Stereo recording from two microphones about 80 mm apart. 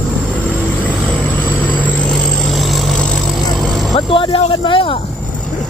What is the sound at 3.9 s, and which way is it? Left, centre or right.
Speech, left.